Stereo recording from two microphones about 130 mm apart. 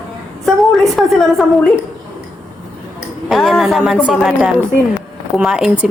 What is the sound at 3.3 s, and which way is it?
A woman's voice, centre (ahead or behind).